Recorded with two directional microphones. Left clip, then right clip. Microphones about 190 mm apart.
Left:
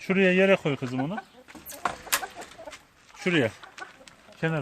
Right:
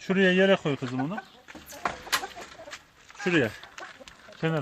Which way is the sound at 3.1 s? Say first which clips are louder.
Even; 60° left (ahead or behind).